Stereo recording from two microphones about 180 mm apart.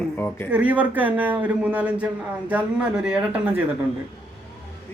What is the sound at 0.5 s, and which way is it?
A man's voice, 10° right (ahead or behind).